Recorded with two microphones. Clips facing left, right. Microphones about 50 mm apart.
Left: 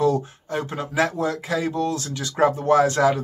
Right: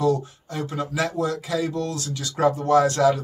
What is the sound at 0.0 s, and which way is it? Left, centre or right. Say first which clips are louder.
Speech: left 1 dB; left.